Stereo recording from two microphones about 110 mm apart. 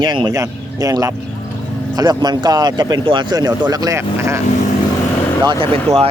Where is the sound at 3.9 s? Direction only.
25° right (ahead or behind).